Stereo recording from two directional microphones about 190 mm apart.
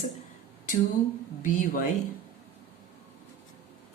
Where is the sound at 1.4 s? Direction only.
45° left (ahead or behind).